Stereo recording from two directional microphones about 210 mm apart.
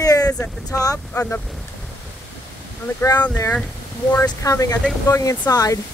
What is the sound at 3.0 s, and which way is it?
Speech, 20° left (ahead or behind).